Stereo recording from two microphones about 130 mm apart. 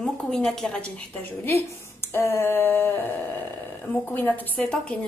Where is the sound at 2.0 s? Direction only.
20° left (ahead or behind).